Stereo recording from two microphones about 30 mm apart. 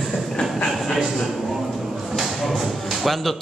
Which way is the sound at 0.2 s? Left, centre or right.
Centre.